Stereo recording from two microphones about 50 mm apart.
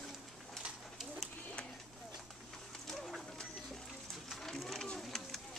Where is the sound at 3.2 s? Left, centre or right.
Centre.